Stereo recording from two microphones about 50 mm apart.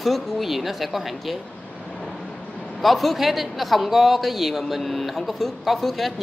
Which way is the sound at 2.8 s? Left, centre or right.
Centre.